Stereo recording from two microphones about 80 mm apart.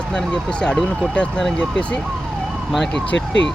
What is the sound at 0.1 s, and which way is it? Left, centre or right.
Speech, centre.